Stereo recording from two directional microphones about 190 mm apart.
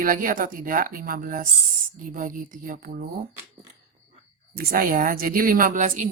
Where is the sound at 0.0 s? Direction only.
45° right (ahead or behind).